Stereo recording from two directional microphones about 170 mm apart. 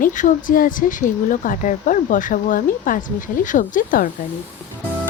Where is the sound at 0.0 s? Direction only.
50° left (ahead or behind).